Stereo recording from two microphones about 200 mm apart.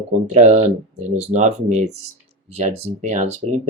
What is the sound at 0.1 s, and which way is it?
Speech, 35° right (ahead or behind).